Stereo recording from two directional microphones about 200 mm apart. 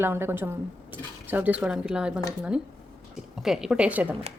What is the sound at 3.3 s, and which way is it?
Speech, centre (ahead or behind).